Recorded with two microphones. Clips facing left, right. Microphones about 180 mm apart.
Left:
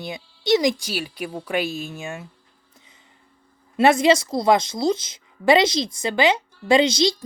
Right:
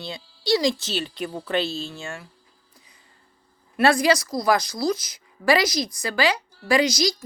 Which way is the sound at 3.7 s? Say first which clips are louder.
Left 3 dB; 25° left (ahead or behind).